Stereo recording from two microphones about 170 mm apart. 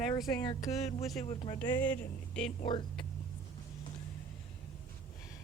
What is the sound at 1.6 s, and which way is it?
Speech, 10° left (ahead or behind).